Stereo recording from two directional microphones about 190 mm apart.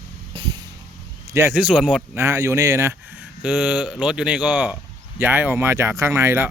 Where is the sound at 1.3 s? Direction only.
15° right (ahead or behind).